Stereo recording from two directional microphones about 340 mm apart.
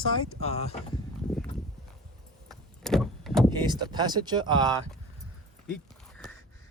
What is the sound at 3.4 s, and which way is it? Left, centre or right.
Speech, centre.